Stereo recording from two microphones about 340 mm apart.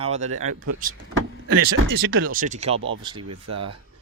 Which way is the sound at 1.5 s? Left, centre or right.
Right.